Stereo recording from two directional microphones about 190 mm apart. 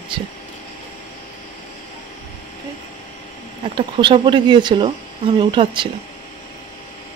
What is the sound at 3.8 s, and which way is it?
Speech, 25° right (ahead or behind).